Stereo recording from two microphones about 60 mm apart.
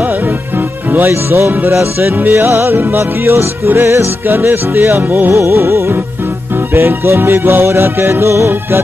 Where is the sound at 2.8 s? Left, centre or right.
Right.